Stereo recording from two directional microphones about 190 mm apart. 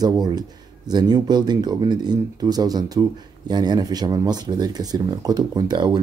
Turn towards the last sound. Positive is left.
turn(degrees=-25)  # may be behind; listen again after turning